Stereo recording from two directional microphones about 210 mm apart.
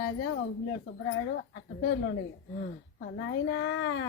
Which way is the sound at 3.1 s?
70° left (ahead or behind).